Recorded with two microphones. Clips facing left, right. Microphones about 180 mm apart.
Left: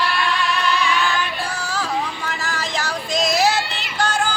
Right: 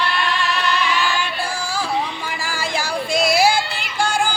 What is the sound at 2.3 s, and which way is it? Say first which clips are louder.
Music: right 1 dB; 10° right (ahead or behind).